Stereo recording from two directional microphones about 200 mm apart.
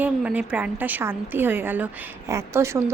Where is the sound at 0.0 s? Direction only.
5° right (ahead or behind).